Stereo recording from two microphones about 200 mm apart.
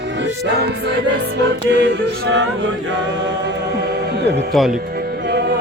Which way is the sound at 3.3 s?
55° right (ahead or behind).